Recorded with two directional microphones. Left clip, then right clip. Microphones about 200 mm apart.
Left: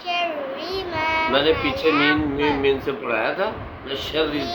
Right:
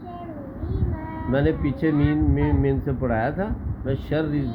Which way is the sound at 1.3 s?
15° right (ahead or behind).